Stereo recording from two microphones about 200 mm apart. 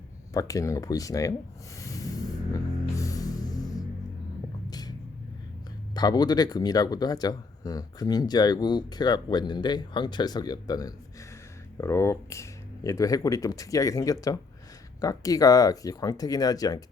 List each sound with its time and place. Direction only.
0.3 s speech: 15° left (ahead or behind)
1.8 s music: 15° left (ahead or behind)
4.7 s vehicle: 20° left (ahead or behind)
5.9 s speech: 20° left (ahead or behind)